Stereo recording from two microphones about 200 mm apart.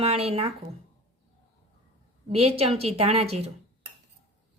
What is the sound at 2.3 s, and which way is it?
A woman's voice, 30° right (ahead or behind).